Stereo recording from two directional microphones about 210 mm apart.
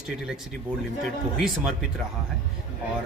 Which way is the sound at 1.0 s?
Centre (ahead or behind).